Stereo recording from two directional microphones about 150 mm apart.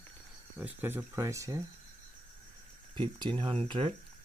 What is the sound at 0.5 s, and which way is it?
Speech, 10° right (ahead or behind).